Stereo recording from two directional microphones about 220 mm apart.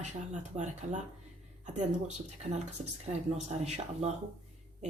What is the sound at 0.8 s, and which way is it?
Speech, 30° right (ahead or behind).